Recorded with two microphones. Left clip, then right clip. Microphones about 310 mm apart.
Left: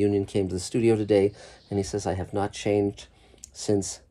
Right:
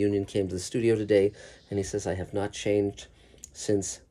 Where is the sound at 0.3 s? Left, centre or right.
Centre.